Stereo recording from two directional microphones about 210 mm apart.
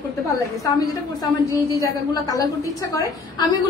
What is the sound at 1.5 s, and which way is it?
A woman's voice, 15° left (ahead or behind).